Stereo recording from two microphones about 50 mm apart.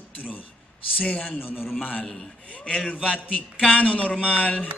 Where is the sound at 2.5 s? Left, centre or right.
Centre.